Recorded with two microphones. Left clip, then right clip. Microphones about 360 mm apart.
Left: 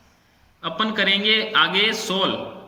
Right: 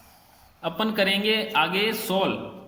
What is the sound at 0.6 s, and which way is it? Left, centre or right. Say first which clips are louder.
A man's voice: left 3 dB; centre.